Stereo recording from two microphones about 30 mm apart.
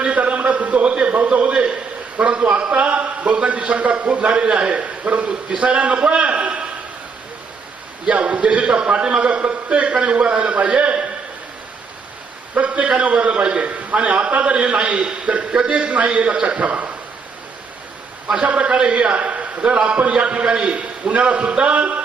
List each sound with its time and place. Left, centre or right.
0.0 s a sound: right
2.1 s a sound: right
3.6 s a man's voice: right
4.3 s a man's voice: right
5.0 s a man's voice: right
5.5 s a sound: right
8.1 s a man's voice: right
8.9 s a man's voice: right
9.9 s a man's voice: right
12.5 s a man's voice: right
18.3 s a man's voice: right